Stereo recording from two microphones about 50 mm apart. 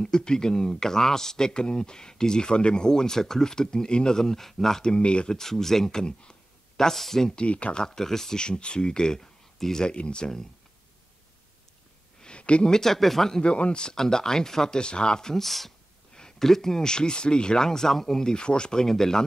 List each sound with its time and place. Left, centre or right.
0.0 s speech: centre
4.9 s speech: left
7.3 s speech: left
12.2 s a sound: left
12.7 s speech: centre
13.4 s speech: centre